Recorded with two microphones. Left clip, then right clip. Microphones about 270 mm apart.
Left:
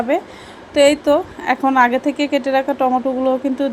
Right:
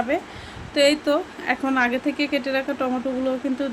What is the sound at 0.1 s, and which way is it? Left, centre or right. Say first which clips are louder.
Speech: left 6 dB; centre.